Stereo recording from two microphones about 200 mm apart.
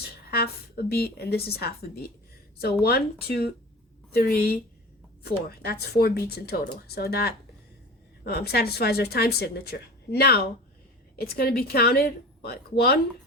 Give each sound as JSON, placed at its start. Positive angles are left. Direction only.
{"t": 0.3, "sound": "speech", "side_deg": 50}